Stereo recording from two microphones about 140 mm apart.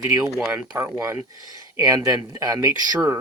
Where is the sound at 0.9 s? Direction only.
15° right (ahead or behind).